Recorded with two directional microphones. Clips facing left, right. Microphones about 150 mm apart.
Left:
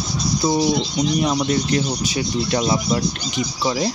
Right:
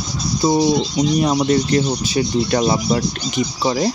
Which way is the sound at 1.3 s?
40° right (ahead or behind).